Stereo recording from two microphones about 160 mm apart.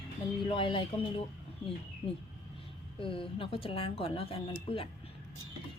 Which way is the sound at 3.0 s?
35° left (ahead or behind).